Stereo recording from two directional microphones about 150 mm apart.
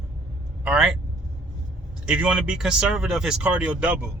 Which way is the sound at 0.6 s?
5° right (ahead or behind).